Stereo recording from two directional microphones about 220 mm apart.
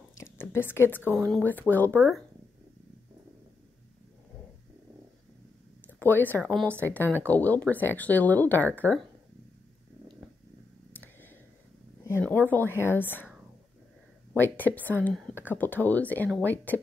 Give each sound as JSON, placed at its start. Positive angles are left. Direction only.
{"t": 0.2, "sound": "a sound", "side_deg": 10}
{"t": 1.1, "sound": "speech", "side_deg": 5}
{"t": 2.0, "sound": "speech", "side_deg": -5}
{"t": 5.9, "sound": "speech", "side_deg": 10}
{"t": 10.9, "sound": "a sound", "side_deg": 10}
{"t": 12.1, "sound": "a woman's voice", "side_deg": 10}
{"t": 14.3, "sound": "speech", "side_deg": 10}